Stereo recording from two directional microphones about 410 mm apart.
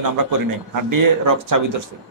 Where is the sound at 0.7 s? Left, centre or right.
Right.